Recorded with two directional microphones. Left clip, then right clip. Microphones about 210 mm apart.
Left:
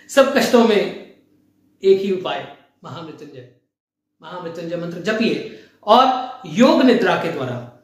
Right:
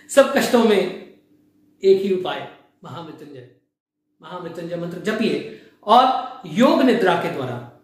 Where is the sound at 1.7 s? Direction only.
10° left (ahead or behind).